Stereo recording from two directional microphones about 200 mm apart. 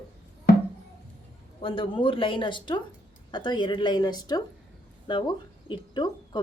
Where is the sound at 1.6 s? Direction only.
25° left (ahead or behind).